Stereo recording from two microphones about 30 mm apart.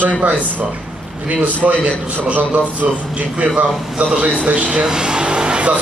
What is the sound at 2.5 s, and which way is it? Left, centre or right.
A man's voice, right.